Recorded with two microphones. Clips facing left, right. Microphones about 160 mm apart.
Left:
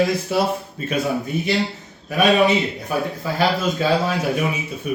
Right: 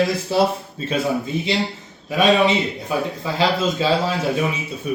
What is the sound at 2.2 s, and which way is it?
Speech, 25° right (ahead or behind).